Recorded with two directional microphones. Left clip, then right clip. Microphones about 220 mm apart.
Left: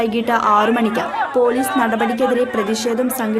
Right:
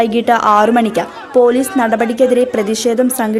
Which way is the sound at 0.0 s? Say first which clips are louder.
Right 5 dB; 20° right (ahead or behind).